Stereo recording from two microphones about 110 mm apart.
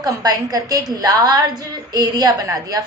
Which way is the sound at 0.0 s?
35° right (ahead or behind).